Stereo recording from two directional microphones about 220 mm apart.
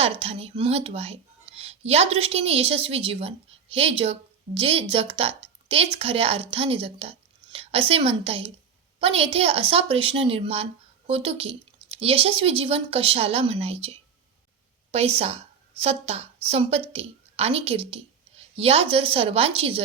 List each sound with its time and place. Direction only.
0.0 s a woman's voice: 25° right (ahead or behind)